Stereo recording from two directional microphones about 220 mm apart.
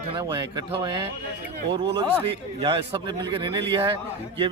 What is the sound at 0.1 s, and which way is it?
Speech, 20° right (ahead or behind).